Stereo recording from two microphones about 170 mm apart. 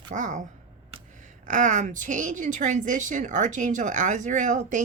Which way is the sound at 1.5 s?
50° right (ahead or behind).